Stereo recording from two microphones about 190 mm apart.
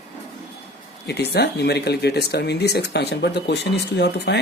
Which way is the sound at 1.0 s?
60° left (ahead or behind).